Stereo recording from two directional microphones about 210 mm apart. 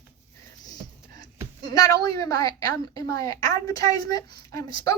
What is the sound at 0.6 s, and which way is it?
Music, 20° left (ahead or behind).